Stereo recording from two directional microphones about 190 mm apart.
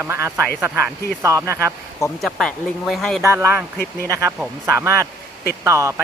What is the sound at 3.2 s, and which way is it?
Speech, 15° right (ahead or behind).